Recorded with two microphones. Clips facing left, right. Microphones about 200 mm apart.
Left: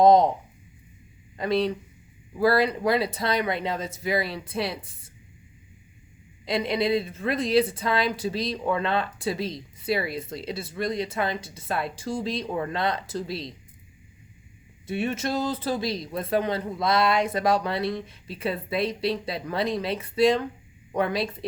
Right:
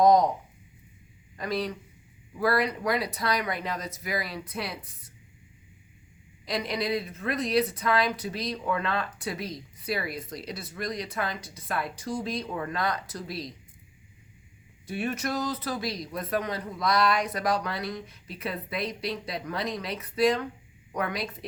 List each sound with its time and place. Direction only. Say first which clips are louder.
0.0 s speech: left 3 dB; 25° left (ahead or behind)
1.4 s a man's voice: left 6 dB; 25° left (ahead or behind)
6.4 s a man's voice: left 5 dB; 25° left (ahead or behind)
14.8 s a man's voice: left 3 dB; 25° left (ahead or behind)